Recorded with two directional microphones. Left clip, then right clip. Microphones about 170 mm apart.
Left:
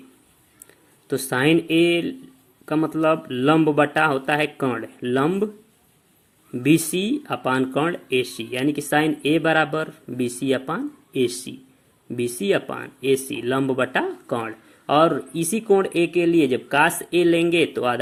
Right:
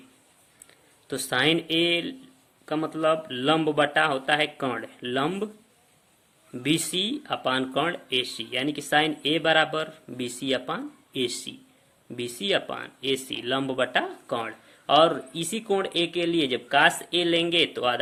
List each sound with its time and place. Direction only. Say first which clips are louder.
1.0 s speech: left 3 dB; 20° left (ahead or behind)
6.6 s speech: left 6 dB; 15° left (ahead or behind)